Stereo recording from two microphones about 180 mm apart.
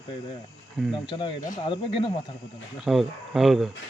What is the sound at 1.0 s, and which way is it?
Speech, 25° left (ahead or behind).